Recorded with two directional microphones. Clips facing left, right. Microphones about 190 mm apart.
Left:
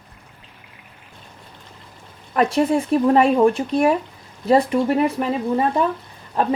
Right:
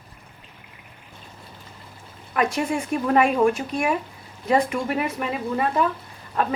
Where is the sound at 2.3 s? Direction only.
35° left (ahead or behind).